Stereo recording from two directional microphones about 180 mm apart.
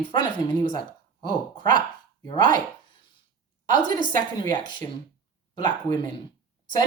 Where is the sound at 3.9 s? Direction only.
25° left (ahead or behind).